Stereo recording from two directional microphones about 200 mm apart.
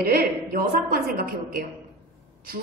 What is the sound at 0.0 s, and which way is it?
A woman's voice, 50° right (ahead or behind).